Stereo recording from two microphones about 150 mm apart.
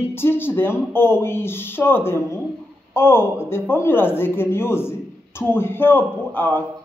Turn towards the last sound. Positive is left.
turn(degrees=10)  # may be behind; listen again after turning